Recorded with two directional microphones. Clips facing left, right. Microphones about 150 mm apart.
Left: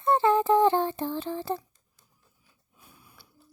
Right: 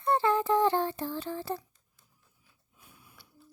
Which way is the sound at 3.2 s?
35° left (ahead or behind).